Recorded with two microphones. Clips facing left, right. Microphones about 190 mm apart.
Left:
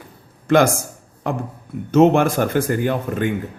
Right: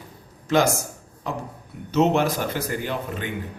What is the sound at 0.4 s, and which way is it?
Speech, 55° left (ahead or behind).